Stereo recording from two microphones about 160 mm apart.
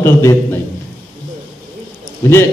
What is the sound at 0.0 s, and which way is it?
Speech, 20° left (ahead or behind).